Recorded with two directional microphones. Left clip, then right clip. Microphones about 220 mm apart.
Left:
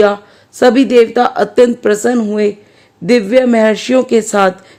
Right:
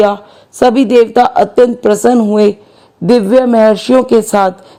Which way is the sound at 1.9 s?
10° left (ahead or behind).